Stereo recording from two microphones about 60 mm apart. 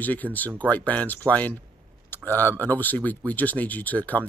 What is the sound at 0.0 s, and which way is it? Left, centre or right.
Speech, left.